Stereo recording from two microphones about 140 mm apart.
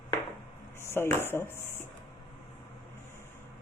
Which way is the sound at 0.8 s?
20° left (ahead or behind).